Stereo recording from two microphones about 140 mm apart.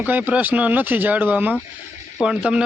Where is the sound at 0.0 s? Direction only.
10° right (ahead or behind).